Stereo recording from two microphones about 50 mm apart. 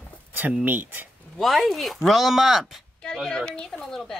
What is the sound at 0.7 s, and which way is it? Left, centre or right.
Speech, right.